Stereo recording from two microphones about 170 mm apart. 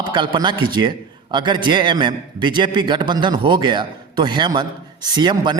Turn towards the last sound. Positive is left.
turn(degrees=-25)  # may be behind; listen again after turning